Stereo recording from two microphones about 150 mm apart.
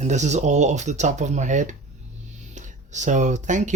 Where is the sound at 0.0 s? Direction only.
50° right (ahead or behind).